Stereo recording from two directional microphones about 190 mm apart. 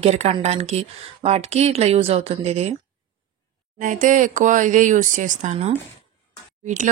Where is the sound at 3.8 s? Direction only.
45° right (ahead or behind).